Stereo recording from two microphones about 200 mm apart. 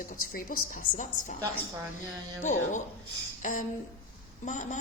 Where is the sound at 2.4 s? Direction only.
40° left (ahead or behind).